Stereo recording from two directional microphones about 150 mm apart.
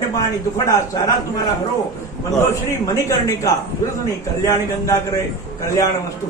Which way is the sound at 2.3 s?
20° left (ahead or behind).